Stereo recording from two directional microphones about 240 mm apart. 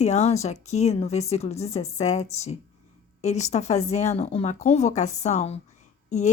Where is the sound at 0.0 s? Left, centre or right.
Left.